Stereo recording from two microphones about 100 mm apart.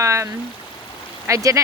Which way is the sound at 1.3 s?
30° right (ahead or behind).